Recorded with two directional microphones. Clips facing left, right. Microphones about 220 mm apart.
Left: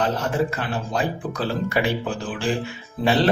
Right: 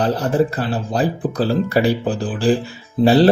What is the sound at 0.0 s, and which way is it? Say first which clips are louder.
Speech: right 5 dB; 35° right (ahead or behind).